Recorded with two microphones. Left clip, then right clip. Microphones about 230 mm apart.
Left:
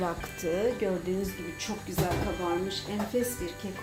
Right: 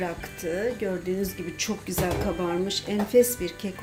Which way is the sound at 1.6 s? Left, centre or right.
Right.